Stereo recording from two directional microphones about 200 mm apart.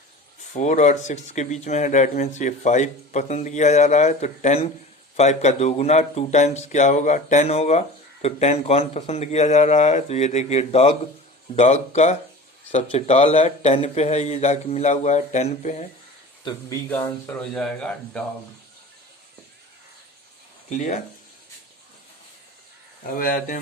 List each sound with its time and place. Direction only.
0.5 s speech: 35° left (ahead or behind)
16.4 s speech: 25° left (ahead or behind)
16.9 s speech: 10° left (ahead or behind)
20.7 s speech: 35° left (ahead or behind)
23.1 s speech: 45° left (ahead or behind)